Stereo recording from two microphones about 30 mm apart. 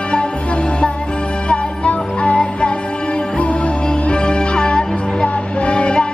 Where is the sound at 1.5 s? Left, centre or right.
Left.